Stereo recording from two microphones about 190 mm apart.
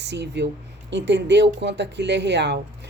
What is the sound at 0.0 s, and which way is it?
Speech, 65° right (ahead or behind).